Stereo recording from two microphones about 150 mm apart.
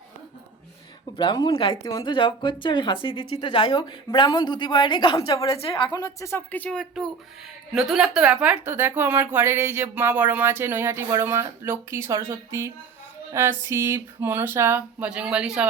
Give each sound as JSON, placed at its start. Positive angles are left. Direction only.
{"t": 1.1, "sound": "speech", "side_deg": 30}
{"t": 1.8, "sound": "a woman's voice", "side_deg": 20}
{"t": 2.0, "sound": "speech", "side_deg": 35}
{"t": 5.5, "sound": "a woman's voice", "side_deg": 40}
{"t": 7.8, "sound": "speech", "side_deg": 0}